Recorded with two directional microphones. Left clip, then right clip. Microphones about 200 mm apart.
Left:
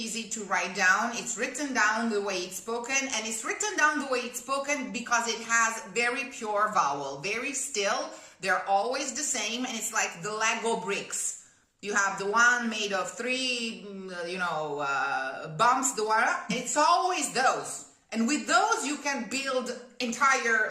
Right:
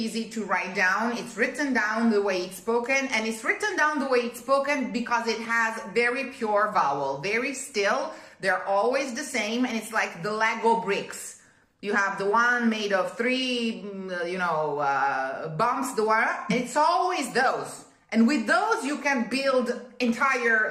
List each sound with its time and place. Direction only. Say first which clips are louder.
0.0 s a woman's voice: right 4 dB; 15° left (ahead or behind)